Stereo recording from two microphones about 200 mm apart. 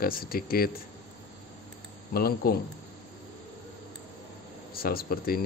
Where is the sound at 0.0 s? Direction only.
50° left (ahead or behind).